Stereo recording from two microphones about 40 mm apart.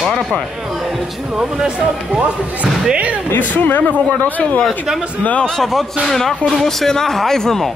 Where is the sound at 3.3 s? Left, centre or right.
Left.